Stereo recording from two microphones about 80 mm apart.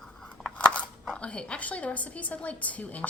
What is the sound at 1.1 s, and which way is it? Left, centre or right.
A woman's voice, centre.